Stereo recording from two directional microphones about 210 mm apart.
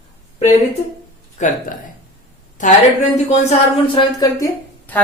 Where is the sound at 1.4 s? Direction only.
35° left (ahead or behind).